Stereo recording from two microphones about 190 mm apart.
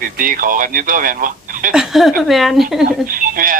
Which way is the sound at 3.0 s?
50° right (ahead or behind).